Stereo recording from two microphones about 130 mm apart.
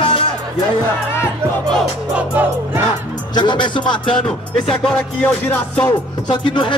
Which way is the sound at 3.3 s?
35° left (ahead or behind).